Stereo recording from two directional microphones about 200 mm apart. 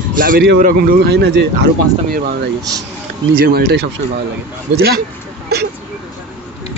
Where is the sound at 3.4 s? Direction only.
50° right (ahead or behind).